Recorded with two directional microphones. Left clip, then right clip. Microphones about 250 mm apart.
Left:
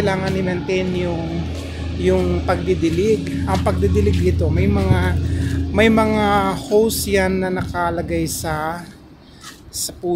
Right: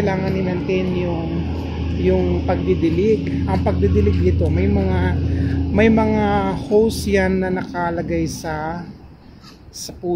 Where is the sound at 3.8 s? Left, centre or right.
Left.